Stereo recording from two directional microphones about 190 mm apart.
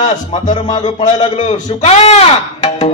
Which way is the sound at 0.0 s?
35° left (ahead or behind).